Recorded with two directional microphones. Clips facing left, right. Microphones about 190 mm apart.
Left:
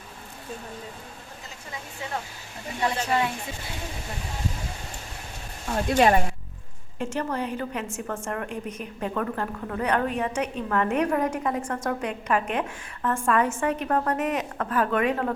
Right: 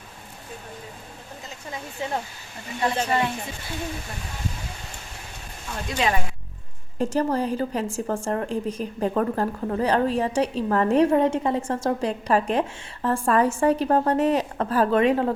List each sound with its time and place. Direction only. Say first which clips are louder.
5.6 s speech: left 5 dB; 50° left (ahead or behind)
7.0 s a woman's voice: right 5 dB; 35° right (ahead or behind)